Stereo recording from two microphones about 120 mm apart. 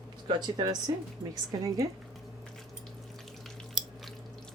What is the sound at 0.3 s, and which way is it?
A woman's voice, 35° right (ahead or behind).